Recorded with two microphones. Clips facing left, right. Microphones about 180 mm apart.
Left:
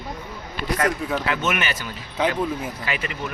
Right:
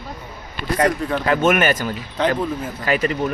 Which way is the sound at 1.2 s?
45° right (ahead or behind).